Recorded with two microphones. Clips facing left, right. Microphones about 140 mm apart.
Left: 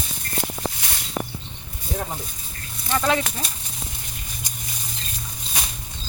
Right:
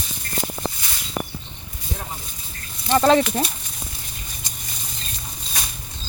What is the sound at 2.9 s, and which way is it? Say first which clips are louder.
Speech: right 6 dB; 30° right (ahead or behind).